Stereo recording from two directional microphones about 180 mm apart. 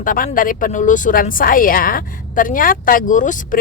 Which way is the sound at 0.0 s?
50° left (ahead or behind).